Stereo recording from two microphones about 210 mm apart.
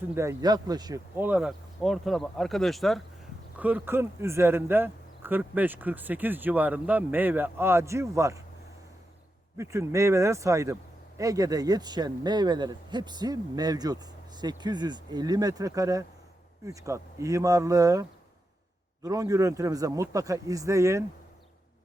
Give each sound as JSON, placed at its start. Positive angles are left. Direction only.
{"t": 0.1, "sound": "speech", "side_deg": -15}
{"t": 9.6, "sound": "a man's voice", "side_deg": -15}
{"t": 19.0, "sound": "speech", "side_deg": -15}